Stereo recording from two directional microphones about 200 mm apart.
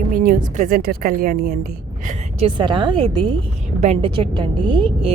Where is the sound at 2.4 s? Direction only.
25° right (ahead or behind).